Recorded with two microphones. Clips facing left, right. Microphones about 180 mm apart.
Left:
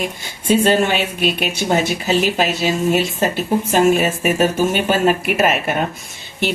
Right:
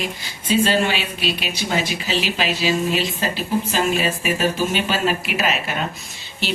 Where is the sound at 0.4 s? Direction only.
50° left (ahead or behind).